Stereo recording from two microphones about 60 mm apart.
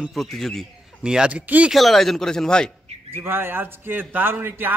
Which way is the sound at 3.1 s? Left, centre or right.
Right.